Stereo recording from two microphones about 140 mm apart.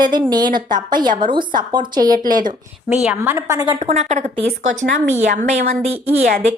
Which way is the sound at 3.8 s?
55° right (ahead or behind).